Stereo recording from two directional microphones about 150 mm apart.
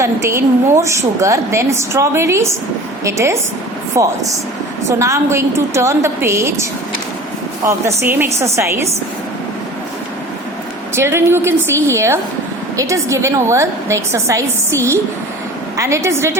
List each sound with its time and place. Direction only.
0.0 s a woman's voice: 20° right (ahead or behind)
10.9 s a woman's voice: 15° right (ahead or behind)